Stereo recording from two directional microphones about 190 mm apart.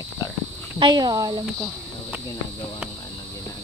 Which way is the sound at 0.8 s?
20° right (ahead or behind).